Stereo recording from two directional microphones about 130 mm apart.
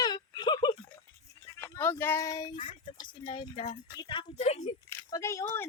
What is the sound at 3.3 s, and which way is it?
Speech, 40° left (ahead or behind).